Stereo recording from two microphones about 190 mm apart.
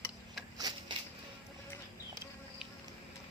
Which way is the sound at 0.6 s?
20° right (ahead or behind).